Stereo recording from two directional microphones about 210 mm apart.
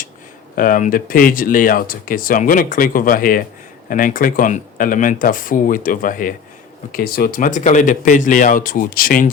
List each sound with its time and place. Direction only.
0.5 s speech: 40° left (ahead or behind)